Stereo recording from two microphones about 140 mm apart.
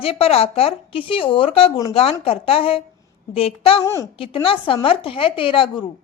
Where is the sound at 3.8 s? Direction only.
20° left (ahead or behind).